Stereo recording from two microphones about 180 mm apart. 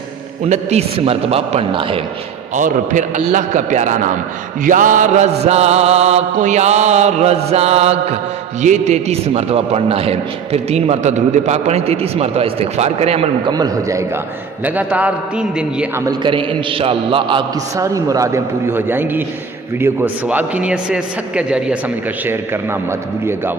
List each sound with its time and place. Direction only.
0.4 s a man's voice: 40° right (ahead or behind)
2.6 s a man's voice: 45° right (ahead or behind); by 14.0 s 20° right (ahead or behind)
14.6 s a man's voice: 10° right (ahead or behind)
16.0 s a man's voice: 25° right (ahead or behind); by 21.8 s 5° right (ahead or behind)